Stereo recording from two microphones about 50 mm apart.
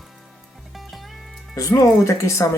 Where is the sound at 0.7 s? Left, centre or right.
Centre.